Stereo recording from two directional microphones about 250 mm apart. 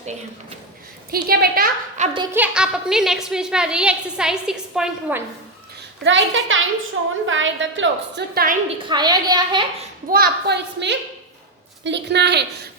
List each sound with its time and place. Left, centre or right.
1.1 s a woman's voice: right
2.1 s a woman's voice: centre
6.1 s a woman's voice: right
8.8 s a woman's voice: centre
10.1 s a woman's voice: right